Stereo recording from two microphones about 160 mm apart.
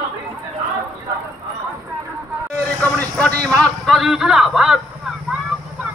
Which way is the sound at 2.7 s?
10° left (ahead or behind).